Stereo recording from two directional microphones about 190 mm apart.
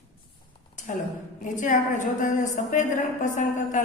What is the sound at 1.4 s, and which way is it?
A woman's voice, 45° left (ahead or behind).